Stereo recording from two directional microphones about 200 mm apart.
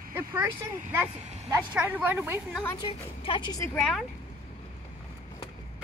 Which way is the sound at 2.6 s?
15° left (ahead or behind).